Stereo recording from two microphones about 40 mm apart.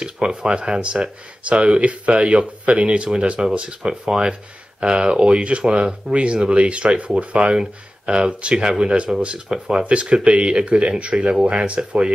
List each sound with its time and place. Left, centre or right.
0.0 s speech: centre